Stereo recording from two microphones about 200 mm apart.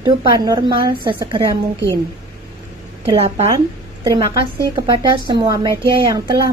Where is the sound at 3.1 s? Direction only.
30° right (ahead or behind).